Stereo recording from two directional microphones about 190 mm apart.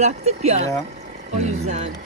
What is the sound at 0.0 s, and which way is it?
Speech, 35° right (ahead or behind).